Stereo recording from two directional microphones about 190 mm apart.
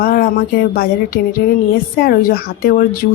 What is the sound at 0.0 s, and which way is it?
Speech, 50° left (ahead or behind).